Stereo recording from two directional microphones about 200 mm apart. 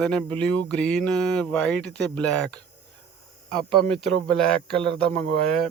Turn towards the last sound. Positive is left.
turn(degrees=5)  # may be behind; listen again after turning